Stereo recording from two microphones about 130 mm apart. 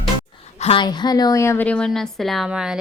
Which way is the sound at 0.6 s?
45° left (ahead or behind).